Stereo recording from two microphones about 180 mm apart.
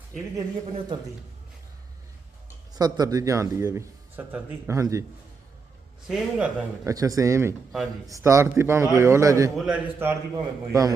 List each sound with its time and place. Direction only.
0.7 s speech: 30° right (ahead or behind)
2.7 s speech: 20° right (ahead or behind)
6.1 s speech: 5° right (ahead or behind)
6.8 s speech: 20° right (ahead or behind)
7.7 s speech: centre (ahead or behind)
8.1 s speech: 15° right (ahead or behind)
9.6 s speech: 5° right (ahead or behind)